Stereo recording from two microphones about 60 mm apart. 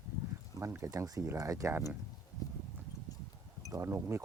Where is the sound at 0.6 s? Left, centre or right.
Right.